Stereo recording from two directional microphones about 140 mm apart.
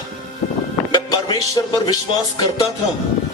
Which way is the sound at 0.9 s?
30° left (ahead or behind).